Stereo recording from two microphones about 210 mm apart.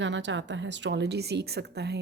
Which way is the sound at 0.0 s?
60° right (ahead or behind).